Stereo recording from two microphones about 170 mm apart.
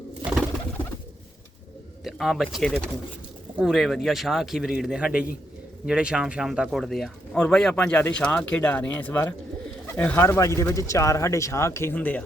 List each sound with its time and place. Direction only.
2.0 s speech: centre (ahead or behind)